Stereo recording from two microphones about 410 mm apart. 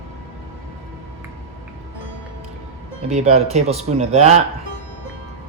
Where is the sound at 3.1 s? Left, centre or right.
Centre.